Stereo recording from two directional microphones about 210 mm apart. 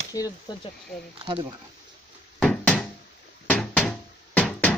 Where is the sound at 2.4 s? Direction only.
5° left (ahead or behind).